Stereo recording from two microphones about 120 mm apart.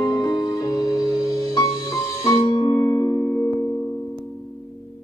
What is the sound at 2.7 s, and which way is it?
Singing bowl, 20° left (ahead or behind).